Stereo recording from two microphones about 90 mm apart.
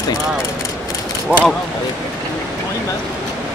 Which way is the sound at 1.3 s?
15° right (ahead or behind).